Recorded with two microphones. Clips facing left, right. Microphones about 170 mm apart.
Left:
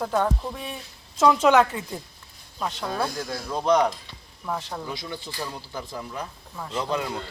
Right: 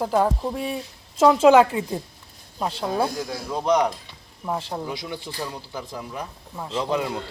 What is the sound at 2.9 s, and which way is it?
Speech, 15° right (ahead or behind).